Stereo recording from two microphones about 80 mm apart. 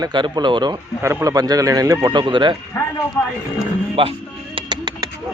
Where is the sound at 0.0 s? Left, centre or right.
Right.